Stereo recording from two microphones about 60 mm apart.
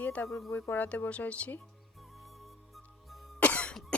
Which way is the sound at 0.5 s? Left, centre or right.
Left.